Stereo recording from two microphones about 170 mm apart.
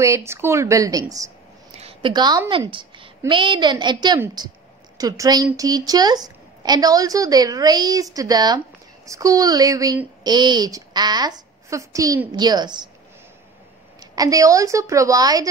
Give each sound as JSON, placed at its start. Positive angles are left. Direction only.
{"t": 0.0, "sound": "a woman's voice", "side_deg": -15}
{"t": 1.8, "sound": "a woman's voice", "side_deg": -30}
{"t": 14.1, "sound": "a woman's voice", "side_deg": -20}